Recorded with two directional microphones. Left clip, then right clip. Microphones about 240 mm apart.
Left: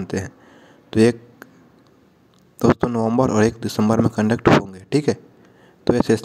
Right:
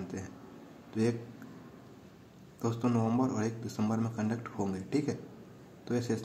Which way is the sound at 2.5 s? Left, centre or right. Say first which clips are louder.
Left 15 dB; left.